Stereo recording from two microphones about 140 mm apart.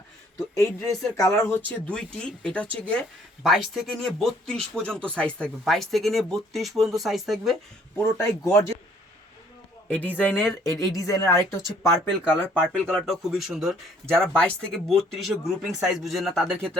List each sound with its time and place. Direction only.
0.5 s a woman's voice: 25° left (ahead or behind); by 7.5 s centre (ahead or behind)
7.9 s speech: 15° left (ahead or behind)
9.9 s a woman's voice: 10° left (ahead or behind)
12.6 s speech: 5° left (ahead or behind)